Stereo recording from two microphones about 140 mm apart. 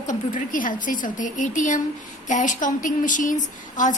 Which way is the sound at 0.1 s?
70° left (ahead or behind).